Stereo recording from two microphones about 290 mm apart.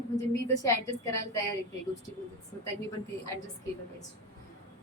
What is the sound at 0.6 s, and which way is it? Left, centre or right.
Speech, centre.